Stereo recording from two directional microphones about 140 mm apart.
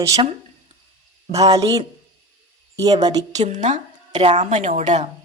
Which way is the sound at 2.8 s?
30° right (ahead or behind).